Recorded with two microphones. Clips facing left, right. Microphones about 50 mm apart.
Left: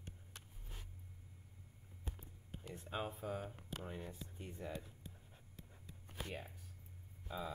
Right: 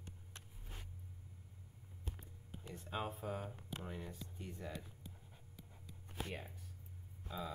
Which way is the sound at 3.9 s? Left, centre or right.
Left.